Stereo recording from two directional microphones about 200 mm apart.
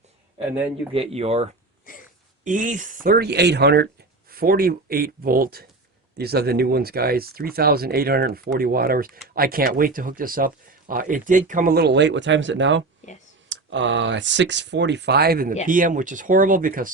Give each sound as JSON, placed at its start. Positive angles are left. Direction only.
{"t": 0.9, "sound": "speech", "side_deg": -30}
{"t": 1.9, "sound": "a sound", "side_deg": 45}
{"t": 2.4, "sound": "speech", "side_deg": -40}